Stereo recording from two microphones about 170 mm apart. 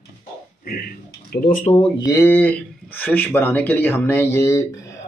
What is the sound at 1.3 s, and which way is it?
Speech, 60° left (ahead or behind).